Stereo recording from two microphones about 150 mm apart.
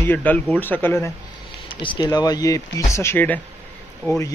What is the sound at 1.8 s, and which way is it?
Speech, 30° left (ahead or behind).